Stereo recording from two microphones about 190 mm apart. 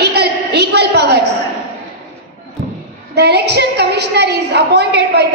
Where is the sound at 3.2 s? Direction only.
60° right (ahead or behind).